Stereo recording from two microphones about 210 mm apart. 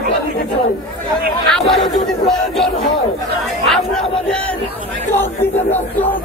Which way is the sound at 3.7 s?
Centre (ahead or behind).